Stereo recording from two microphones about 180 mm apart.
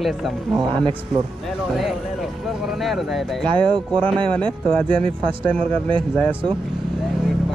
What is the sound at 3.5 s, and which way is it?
Speech, 25° right (ahead or behind).